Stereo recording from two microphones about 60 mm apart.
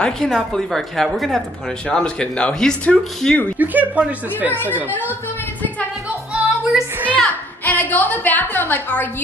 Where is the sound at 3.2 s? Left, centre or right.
Centre.